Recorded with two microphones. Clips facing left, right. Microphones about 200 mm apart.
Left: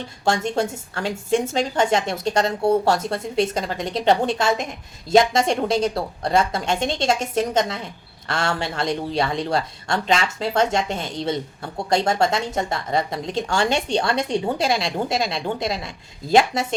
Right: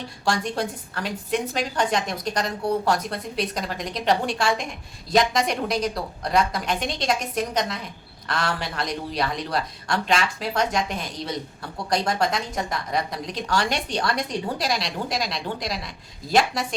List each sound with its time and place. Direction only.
0.3 s a woman's voice: 25° left (ahead or behind)